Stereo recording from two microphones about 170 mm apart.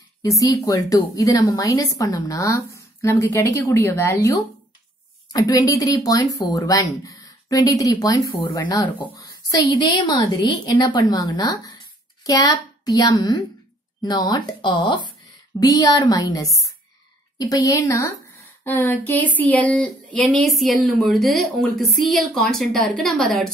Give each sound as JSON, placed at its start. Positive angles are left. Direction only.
{"t": 0.2, "sound": "a woman's voice", "side_deg": 20}